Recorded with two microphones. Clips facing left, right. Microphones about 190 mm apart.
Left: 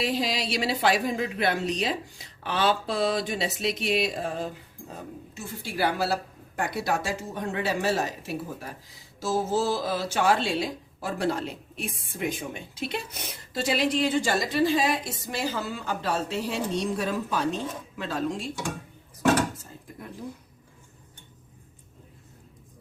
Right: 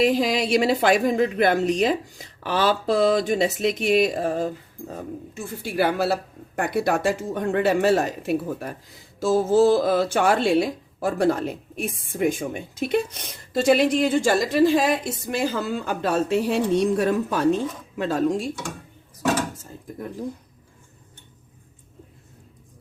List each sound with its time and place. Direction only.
0.0 s speech: 50° right (ahead or behind)
5.3 s speech: 55° right (ahead or behind)
13.1 s speech: 5° left (ahead or behind)
13.5 s speech: 50° right (ahead or behind)